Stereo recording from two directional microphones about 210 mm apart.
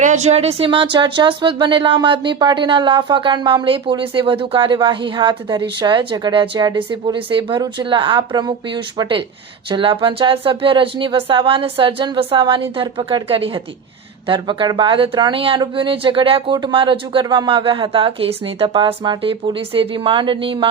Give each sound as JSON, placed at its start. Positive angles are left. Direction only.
{"t": 0.0, "sound": "speech", "side_deg": -35}